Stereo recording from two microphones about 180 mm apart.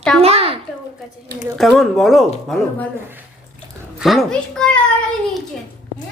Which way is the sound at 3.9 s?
Centre (ahead or behind).